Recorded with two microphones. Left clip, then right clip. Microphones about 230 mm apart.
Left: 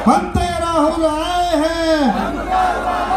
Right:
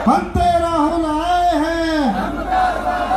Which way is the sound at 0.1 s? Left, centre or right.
Left.